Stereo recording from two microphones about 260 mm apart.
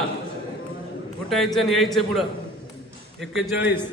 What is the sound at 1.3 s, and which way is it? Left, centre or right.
A man's voice, centre.